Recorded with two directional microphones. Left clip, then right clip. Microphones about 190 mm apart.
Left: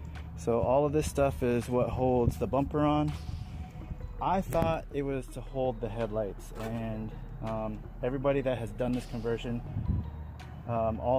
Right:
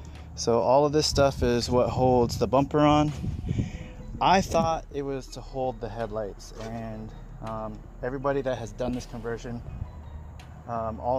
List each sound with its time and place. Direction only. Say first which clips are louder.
0.4 s speech: right 6 dB; 20° right (ahead or behind); by 3.1 s 40° right (ahead or behind)
4.2 s speech: right 9 dB; 45° right (ahead or behind)
4.6 s speech: right 3 dB; centre (ahead or behind)
5.5 s speech: right 2 dB; 15° right (ahead or behind)
7.4 s speech: right 1 dB; 5° right (ahead or behind)
10.7 s speech: right 1 dB; 5° right (ahead or behind)